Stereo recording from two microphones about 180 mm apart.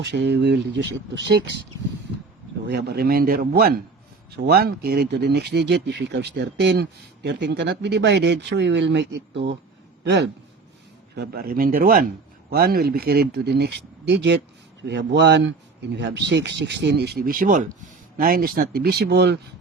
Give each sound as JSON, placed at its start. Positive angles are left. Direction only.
{"t": 0.0, "sound": "speech", "side_deg": -70}
{"t": 2.6, "sound": "a man's voice", "side_deg": -65}
{"t": 11.1, "sound": "a man's voice", "side_deg": -60}